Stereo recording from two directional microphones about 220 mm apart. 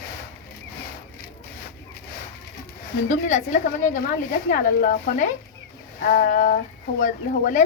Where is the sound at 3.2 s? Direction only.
35° left (ahead or behind).